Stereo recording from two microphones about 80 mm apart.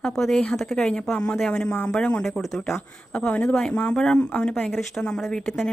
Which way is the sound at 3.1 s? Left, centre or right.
Centre.